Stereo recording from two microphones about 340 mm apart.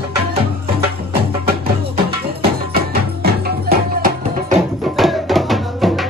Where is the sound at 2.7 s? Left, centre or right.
Right.